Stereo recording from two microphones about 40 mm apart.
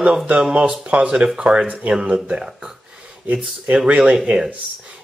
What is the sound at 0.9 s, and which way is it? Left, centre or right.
Speech, right.